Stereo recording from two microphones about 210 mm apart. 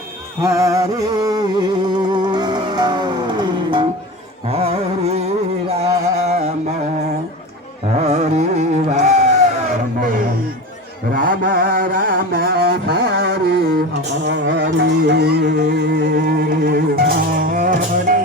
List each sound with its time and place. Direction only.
0.4 s music: 15° right (ahead or behind)
4.4 s carnatic music: 30° right (ahead or behind)
6.2 s a sound: 30° right (ahead or behind)
7.9 s music: 30° right (ahead or behind)
11.1 s mantra: 40° right (ahead or behind)
14.3 s music: 60° right (ahead or behind); by 18.2 s 40° right (ahead or behind)